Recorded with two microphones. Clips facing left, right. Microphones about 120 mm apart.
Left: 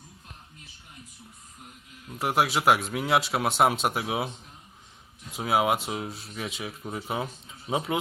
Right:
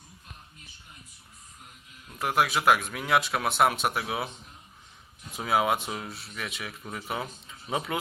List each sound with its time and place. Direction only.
2.2 s speech: 25° left (ahead or behind)
5.3 s speech: 15° left (ahead or behind)